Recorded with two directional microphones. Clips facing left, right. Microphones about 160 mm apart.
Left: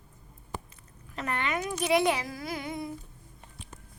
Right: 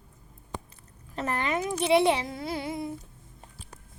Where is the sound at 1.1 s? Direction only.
35° right (ahead or behind).